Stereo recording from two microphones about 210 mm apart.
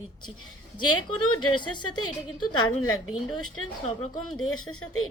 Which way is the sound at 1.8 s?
90° left.